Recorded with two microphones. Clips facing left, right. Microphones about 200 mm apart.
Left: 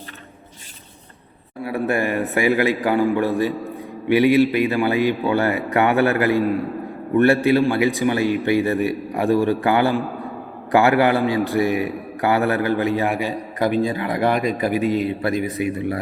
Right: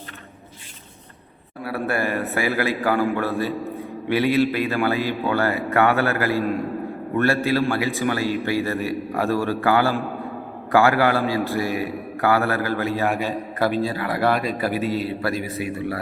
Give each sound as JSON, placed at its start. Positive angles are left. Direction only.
{"t": 1.6, "sound": "a man's voice", "side_deg": 15}